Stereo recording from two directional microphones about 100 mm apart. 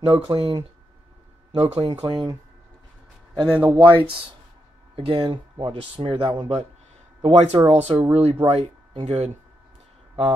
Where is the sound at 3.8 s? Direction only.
55° right (ahead or behind).